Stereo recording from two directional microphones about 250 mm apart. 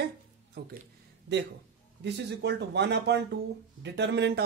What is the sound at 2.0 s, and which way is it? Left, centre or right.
Speech, right.